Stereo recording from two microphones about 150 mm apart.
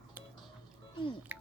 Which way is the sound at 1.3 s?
10° right (ahead or behind).